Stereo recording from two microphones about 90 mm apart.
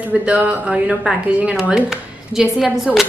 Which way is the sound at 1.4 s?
10° right (ahead or behind).